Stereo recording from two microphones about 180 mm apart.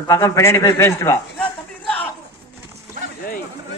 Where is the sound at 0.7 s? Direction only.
15° left (ahead or behind).